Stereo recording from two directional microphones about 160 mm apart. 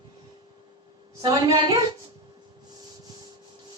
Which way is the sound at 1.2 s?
20° right (ahead or behind).